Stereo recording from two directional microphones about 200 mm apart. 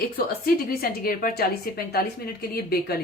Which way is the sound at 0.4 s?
50° left (ahead or behind).